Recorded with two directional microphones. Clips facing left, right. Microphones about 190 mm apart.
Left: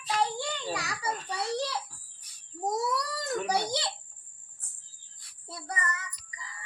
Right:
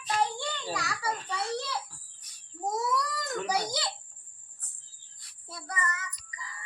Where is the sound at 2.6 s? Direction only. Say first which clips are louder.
Even; 35° left (ahead or behind).